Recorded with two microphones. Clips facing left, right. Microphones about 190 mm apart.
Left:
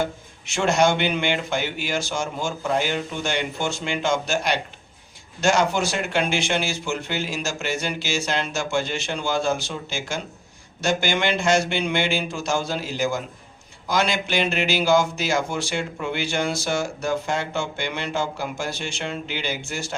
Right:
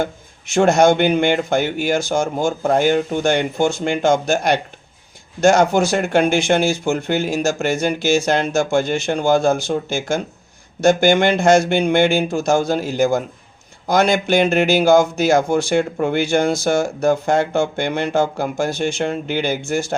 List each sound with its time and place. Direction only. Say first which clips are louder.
0.0 s speech: right 3 dB; 50° right (ahead or behind)